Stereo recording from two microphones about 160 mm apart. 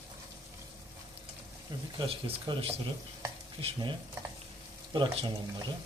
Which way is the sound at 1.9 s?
30° right (ahead or behind).